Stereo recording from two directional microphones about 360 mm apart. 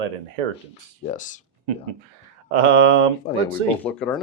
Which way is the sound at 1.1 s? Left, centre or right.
Left.